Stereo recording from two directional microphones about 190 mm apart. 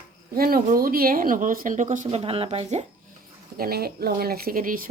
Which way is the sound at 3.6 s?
55° right (ahead or behind).